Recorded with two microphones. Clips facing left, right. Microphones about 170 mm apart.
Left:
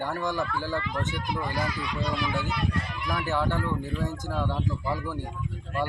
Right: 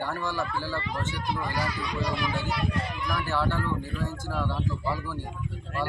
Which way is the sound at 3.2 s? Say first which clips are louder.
Left 1 dB; 20° left (ahead or behind).